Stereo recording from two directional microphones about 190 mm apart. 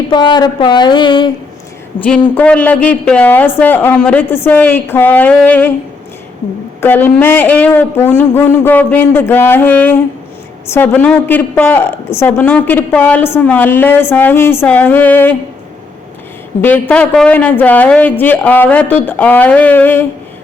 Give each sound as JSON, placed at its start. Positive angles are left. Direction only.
{"t": 0.1, "sound": "a sound", "side_deg": 25}
{"t": 2.0, "sound": "a woman's voice", "side_deg": 5}
{"t": 6.8, "sound": "a woman's voice", "side_deg": 10}
{"t": 16.6, "sound": "a woman's voice", "side_deg": 10}